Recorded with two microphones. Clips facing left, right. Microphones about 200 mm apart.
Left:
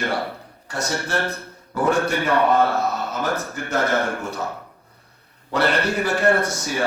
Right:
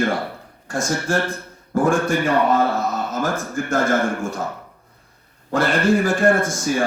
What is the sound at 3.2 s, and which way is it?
A man's voice, 50° right (ahead or behind).